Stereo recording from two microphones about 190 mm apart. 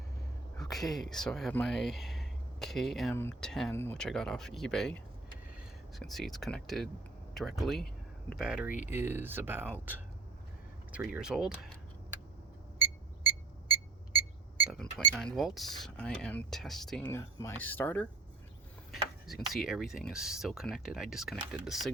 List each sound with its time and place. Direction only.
0.5 s a sound: centre (ahead or behind)
1.1 s speech: centre (ahead or behind)
8.7 s speech: 40° left (ahead or behind)
9.0 s speech: 10° right (ahead or behind)
10.9 s speech: 5° right (ahead or behind)
14.7 s speech: 5° left (ahead or behind)
17.1 s speech: 15° left (ahead or behind)